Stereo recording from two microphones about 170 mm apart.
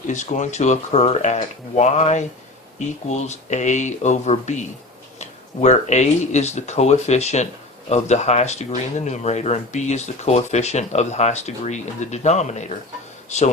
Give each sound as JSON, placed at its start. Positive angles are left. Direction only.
{"t": 0.1, "sound": "speech", "side_deg": 45}